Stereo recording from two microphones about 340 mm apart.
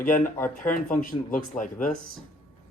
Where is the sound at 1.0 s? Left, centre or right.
Left.